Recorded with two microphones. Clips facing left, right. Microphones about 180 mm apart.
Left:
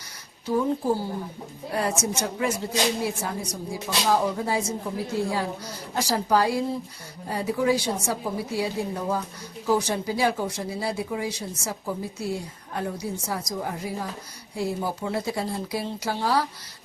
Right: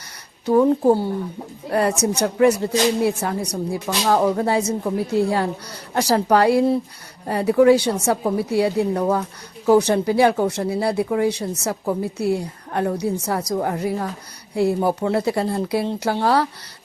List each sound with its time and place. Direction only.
0.4 s a woman's voice: 60° right (ahead or behind)